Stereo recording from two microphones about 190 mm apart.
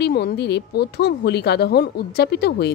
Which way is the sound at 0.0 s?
60° left (ahead or behind).